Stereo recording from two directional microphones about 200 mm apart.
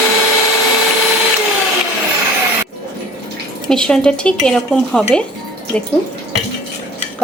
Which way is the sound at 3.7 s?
5° left (ahead or behind).